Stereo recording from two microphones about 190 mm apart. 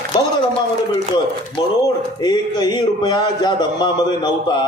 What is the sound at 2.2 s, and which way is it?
A man's voice, 20° left (ahead or behind).